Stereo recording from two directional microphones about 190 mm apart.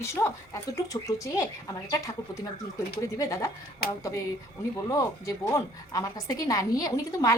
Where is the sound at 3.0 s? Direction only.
15° left (ahead or behind).